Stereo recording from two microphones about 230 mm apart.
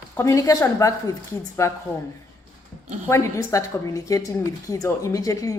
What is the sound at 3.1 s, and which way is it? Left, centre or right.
A woman's voice, centre.